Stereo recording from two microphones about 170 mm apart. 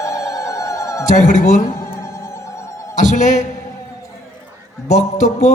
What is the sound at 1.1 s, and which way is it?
Speech, 45° left (ahead or behind).